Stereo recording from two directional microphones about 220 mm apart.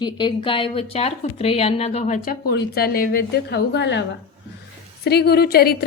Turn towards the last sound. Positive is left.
turn(degrees=45)  # may be behind; listen again after turning